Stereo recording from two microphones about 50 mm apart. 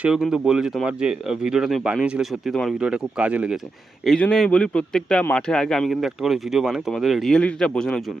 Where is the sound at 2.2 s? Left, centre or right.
Centre.